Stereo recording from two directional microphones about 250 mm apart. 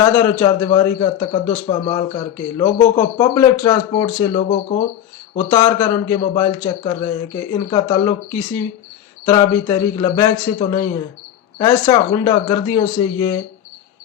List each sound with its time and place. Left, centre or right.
0.0 s a man's voice: centre
5.4 s a man's voice: centre